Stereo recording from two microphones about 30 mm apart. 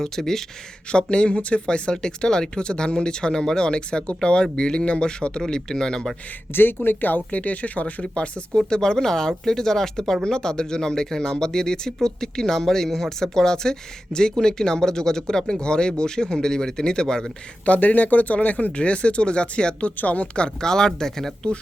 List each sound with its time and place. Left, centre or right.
0.0 s speech: centre
0.9 s speech: left
1.6 s speech: left
5.4 s speech: centre
6.7 s speech: left
7.3 s speech: left
8.0 s speech: left
8.5 s speech: left
17.7 s speech: left
18.3 s speech: left
20.0 s speech: left
20.6 s speech: left